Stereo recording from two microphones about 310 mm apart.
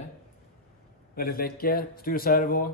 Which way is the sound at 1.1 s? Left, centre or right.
Left.